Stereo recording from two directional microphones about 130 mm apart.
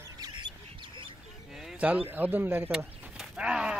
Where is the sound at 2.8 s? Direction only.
10° right (ahead or behind).